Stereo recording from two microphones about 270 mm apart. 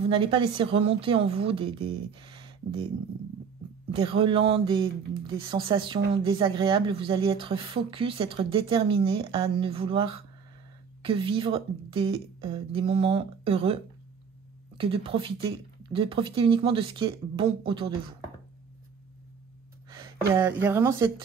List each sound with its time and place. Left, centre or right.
0.0 s speech: centre
3.9 s speech: centre
14.8 s speech: centre
20.6 s speech: centre